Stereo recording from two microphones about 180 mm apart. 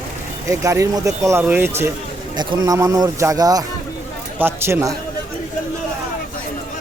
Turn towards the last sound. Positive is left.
turn(degrees=-15)  # may be behind; listen again after turning